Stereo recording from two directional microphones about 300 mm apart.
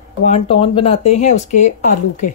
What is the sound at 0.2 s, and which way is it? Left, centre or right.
Speech, centre.